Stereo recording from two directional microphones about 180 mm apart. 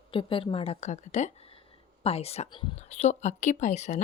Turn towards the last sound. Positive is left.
turn(degrees=40)  # may be behind; listen again after turning